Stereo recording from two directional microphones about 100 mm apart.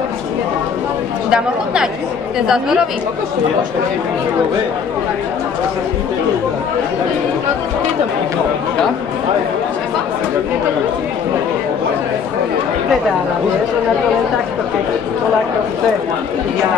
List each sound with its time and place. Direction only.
1.3 s speech: 5° right (ahead or behind)